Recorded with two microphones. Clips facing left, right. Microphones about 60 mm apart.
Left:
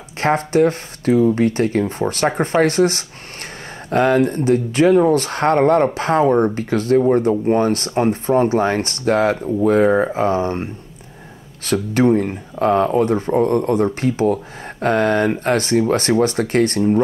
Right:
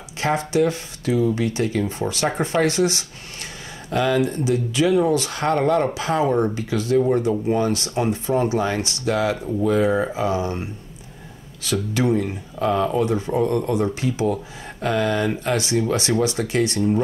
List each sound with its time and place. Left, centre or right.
0.2 s speech: left